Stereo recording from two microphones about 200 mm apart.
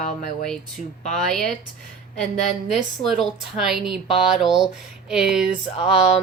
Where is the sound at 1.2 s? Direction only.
Centre (ahead or behind).